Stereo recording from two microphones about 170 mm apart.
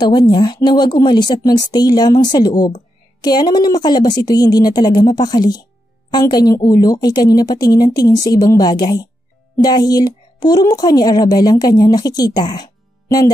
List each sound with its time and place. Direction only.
0.0 s a woman's voice: 25° left (ahead or behind)